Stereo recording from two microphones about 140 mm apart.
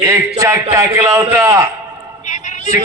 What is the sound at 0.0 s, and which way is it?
A man's voice, 20° right (ahead or behind).